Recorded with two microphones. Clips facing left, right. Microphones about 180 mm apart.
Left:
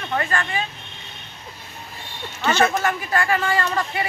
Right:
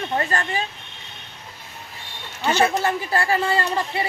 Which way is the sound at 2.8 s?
30° right (ahead or behind).